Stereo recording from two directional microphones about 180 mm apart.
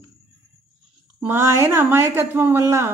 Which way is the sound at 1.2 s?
15° right (ahead or behind).